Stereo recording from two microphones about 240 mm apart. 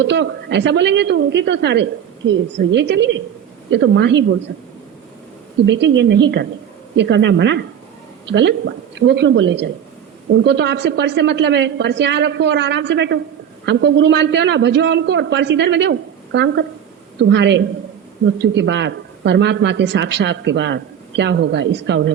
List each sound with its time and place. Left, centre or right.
0.0 s speech: right
5.6 s speech: right